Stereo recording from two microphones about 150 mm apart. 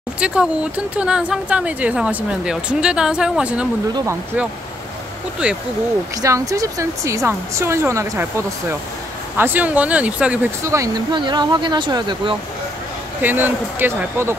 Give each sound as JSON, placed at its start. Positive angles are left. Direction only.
{"t": 0.2, "sound": "speech", "side_deg": -5}
{"t": 3.9, "sound": "speech", "side_deg": -20}
{"t": 5.4, "sound": "speech", "side_deg": -10}
{"t": 6.2, "sound": "speech", "side_deg": -20}
{"t": 10.6, "sound": "speech", "side_deg": -20}
{"t": 13.2, "sound": "speech", "side_deg": -15}